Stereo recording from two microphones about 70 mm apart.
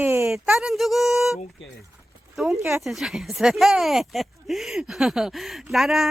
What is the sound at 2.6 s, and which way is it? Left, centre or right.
Speech, right.